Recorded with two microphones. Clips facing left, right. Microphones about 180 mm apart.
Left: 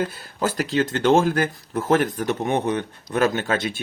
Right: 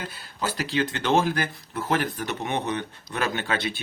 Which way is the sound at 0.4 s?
50° left (ahead or behind).